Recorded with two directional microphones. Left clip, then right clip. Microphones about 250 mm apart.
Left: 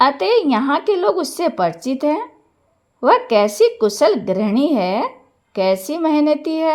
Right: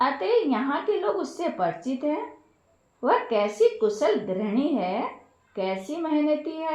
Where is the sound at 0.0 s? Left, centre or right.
Left.